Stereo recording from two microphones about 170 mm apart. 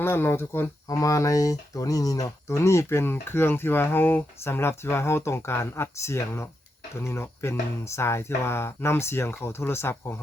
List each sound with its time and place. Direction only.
0.0 s speech: 15° left (ahead or behind)